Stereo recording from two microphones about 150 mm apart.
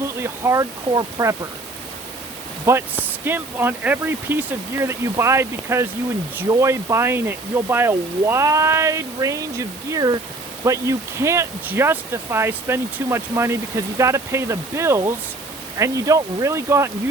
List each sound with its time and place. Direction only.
0.0 s speech: 20° right (ahead or behind)
2.6 s speech: 15° right (ahead or behind)